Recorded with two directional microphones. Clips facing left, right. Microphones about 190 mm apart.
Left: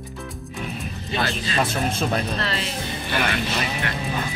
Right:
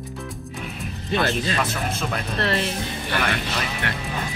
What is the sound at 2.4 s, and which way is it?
Speech, 55° right (ahead or behind).